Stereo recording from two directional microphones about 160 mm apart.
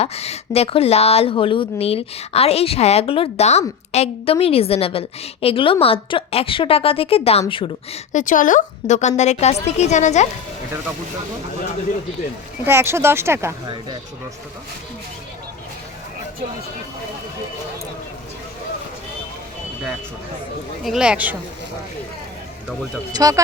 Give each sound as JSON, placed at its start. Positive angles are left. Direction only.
{"t": 0.0, "sound": "speech", "side_deg": 40}
{"t": 8.1, "sound": "a woman's voice", "side_deg": 55}
{"t": 12.6, "sound": "speech", "side_deg": -15}
{"t": 20.8, "sound": "speech", "side_deg": -5}
{"t": 23.1, "sound": "speech", "side_deg": -25}